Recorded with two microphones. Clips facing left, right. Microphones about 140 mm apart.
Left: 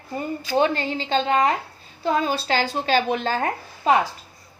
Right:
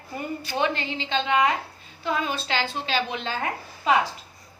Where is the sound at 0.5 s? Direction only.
40° left (ahead or behind).